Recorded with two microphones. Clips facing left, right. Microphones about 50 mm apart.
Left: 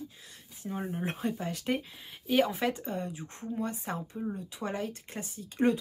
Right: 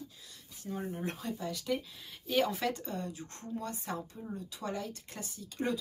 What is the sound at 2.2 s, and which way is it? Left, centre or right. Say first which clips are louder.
A woman's voice: left 4 dB; centre.